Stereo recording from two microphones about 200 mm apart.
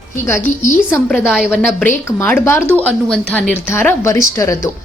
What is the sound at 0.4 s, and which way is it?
Speech, 40° left (ahead or behind).